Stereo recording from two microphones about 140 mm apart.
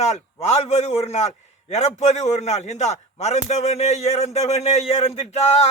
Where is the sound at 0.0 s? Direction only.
50° left (ahead or behind).